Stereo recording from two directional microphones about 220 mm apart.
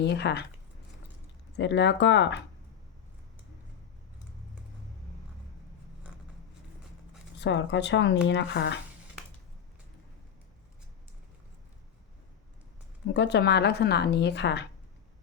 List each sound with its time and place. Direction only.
0.0 s speech: 50° left (ahead or behind)
1.5 s speech: 55° left (ahead or behind)
7.4 s speech: 55° left (ahead or behind)
13.1 s speech: 50° left (ahead or behind)